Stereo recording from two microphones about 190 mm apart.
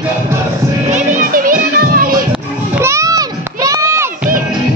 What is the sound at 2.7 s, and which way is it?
Music, 15° right (ahead or behind).